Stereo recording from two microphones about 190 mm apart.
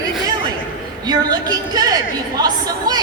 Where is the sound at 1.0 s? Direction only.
20° right (ahead or behind).